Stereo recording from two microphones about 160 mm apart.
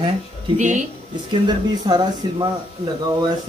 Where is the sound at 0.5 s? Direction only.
50° right (ahead or behind).